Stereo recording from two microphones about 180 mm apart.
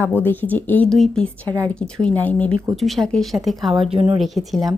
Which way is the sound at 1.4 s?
15° right (ahead or behind).